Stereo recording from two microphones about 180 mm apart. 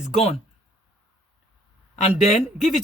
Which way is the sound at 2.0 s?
40° left (ahead or behind).